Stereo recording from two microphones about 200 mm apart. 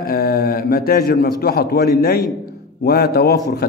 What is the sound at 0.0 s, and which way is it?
A man's voice, 50° left (ahead or behind).